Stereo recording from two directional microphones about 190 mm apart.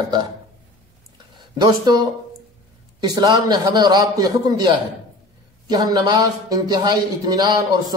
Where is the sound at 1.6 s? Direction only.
20° right (ahead or behind).